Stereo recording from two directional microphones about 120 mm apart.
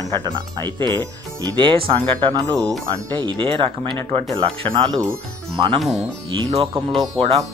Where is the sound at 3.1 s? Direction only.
40° right (ahead or behind).